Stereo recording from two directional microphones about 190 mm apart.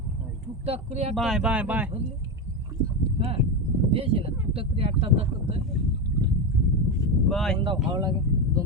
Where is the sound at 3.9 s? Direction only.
30° right (ahead or behind).